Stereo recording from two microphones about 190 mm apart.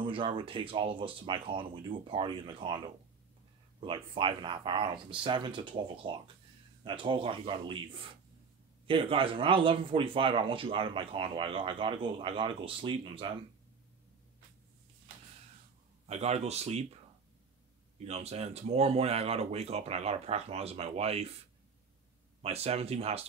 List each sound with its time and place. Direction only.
0.0 s speech: 25° right (ahead or behind)
3.8 s speech: 25° right (ahead or behind)
16.1 s speech: 35° right (ahead or behind)
17.9 s speech: 35° right (ahead or behind)
22.4 s speech: 35° right (ahead or behind)